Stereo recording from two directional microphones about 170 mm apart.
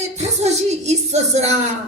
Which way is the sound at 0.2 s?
40° right (ahead or behind).